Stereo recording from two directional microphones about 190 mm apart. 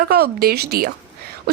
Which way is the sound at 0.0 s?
55° right (ahead or behind).